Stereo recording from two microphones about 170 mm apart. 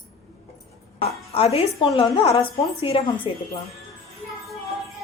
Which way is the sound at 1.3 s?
35° left (ahead or behind).